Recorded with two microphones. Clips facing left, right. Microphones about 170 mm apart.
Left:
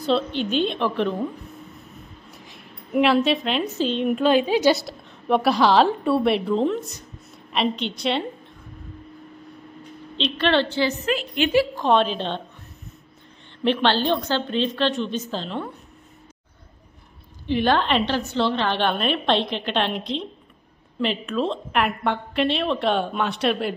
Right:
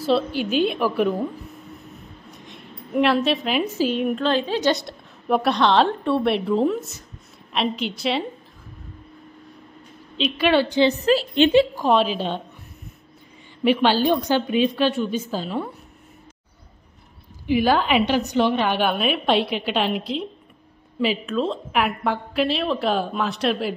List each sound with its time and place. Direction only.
0.0 s a woman's voice: 5° right (ahead or behind)
2.3 s a woman's voice: 5° left (ahead or behind)
4.1 s a woman's voice: 10° left (ahead or behind)
10.1 s a woman's voice: 10° right (ahead or behind)
10.8 s a woman's voice: 35° right (ahead or behind)
11.7 s a woman's voice: 5° right (ahead or behind)
13.7 s a woman's voice: 10° right (ahead or behind)
17.5 s a woman's voice: 5° right (ahead or behind)